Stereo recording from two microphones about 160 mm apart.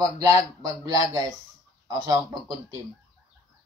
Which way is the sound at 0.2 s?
25° right (ahead or behind).